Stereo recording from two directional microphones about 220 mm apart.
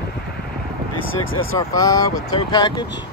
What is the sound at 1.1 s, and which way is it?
Speech, 65° left (ahead or behind).